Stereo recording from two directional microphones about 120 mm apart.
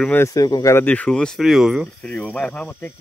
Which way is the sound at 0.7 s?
15° left (ahead or behind).